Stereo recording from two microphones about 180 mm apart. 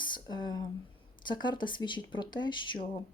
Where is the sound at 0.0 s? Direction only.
25° left (ahead or behind).